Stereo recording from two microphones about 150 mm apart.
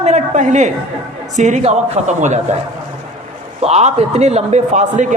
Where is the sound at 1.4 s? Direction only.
55° right (ahead or behind).